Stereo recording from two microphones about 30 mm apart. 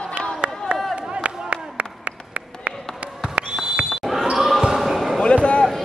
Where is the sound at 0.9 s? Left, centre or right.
Right.